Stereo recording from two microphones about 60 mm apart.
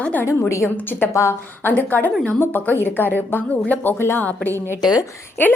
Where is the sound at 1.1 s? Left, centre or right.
Left.